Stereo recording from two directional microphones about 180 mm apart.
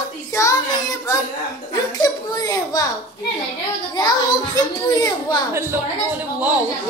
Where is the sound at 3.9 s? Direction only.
20° left (ahead or behind).